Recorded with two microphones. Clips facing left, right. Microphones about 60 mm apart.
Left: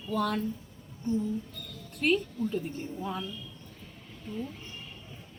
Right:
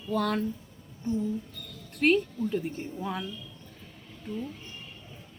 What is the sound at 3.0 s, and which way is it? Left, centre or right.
Speech, right.